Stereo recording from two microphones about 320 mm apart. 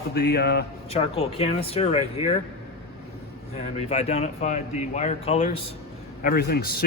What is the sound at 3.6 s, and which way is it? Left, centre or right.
Speech, centre.